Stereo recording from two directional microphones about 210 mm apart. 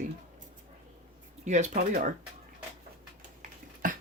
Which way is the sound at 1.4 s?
35° right (ahead or behind).